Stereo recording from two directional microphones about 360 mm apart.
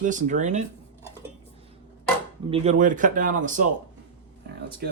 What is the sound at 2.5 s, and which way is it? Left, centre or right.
Speech, centre.